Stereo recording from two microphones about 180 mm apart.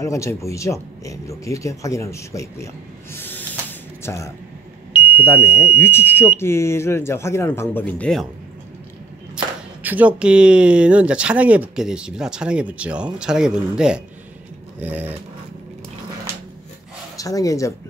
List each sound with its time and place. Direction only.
0.0 s speech: 15° left (ahead or behind)
9.8 s speech: 10° right (ahead or behind)
14.8 s dog: 10° right (ahead or behind)
17.2 s speech: 20° left (ahead or behind)